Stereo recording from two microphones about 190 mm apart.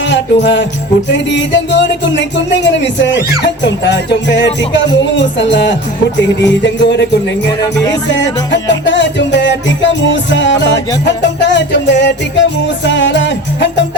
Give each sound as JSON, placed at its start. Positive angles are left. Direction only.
{"t": 0.1, "sound": "music", "side_deg": 70}
{"t": 1.1, "sound": "speech", "side_deg": 70}
{"t": 8.5, "sound": "speech", "side_deg": 70}